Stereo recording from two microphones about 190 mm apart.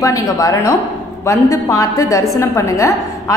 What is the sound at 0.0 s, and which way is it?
A woman's voice, 15° left (ahead or behind).